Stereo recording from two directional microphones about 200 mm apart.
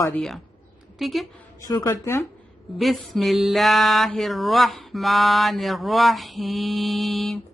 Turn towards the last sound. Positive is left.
turn(degrees=0)  # may be behind; listen again after turning